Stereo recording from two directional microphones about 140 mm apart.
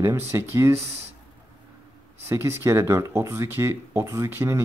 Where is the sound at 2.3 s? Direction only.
20° right (ahead or behind).